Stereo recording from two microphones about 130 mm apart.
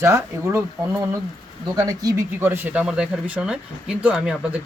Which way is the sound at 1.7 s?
30° right (ahead or behind).